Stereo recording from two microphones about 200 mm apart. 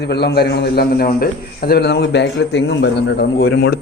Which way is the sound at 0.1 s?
55° left (ahead or behind).